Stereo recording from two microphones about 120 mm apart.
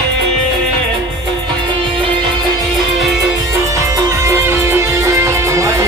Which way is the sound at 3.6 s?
25° right (ahead or behind).